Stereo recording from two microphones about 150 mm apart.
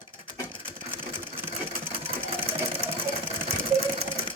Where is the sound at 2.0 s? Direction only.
35° right (ahead or behind).